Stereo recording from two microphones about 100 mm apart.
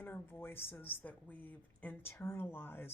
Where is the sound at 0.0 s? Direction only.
20° left (ahead or behind).